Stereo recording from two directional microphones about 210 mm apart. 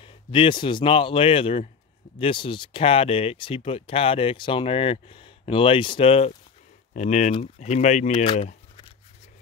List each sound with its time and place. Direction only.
0.0 s speech: 25° left (ahead or behind)